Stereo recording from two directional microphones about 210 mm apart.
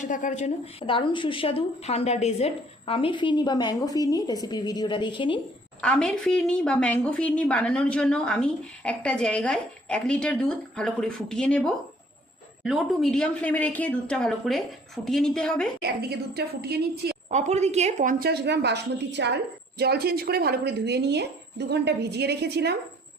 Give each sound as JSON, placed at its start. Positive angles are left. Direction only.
{"t": 0.0, "sound": "speech", "side_deg": 35}
{"t": 5.8, "sound": "a woman's voice", "side_deg": 5}
{"t": 15.8, "sound": "speech", "side_deg": -50}
{"t": 17.2, "sound": "speech", "side_deg": -35}